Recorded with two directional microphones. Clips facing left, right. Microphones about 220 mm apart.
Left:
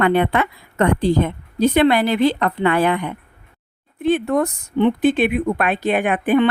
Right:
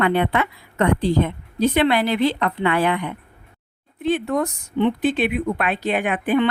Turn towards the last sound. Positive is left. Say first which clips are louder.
# left 3 dB
turn(degrees=50)  # may be behind; listen again after turning